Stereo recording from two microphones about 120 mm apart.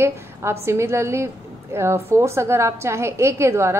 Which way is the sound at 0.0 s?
20° right (ahead or behind).